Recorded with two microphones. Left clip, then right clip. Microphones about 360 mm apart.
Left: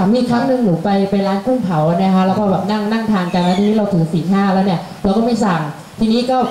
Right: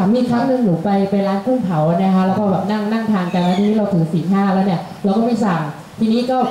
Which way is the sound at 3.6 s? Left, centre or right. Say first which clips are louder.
Left 2 dB; centre.